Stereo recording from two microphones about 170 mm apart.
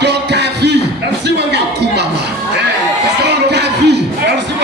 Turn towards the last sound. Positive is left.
turn(degrees=-80)